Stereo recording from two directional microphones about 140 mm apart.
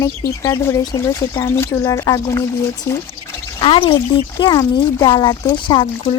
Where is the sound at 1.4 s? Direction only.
20° left (ahead or behind).